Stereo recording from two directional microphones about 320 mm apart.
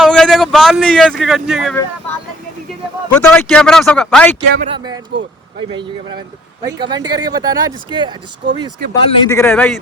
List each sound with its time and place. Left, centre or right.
0.0 s a sound: centre
1.2 s speech: centre
4.5 s speech: centre
6.7 s speech: centre
8.9 s a man's voice: centre